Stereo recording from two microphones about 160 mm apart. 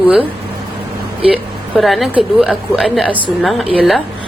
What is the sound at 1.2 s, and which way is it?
A woman's voice, centre (ahead or behind).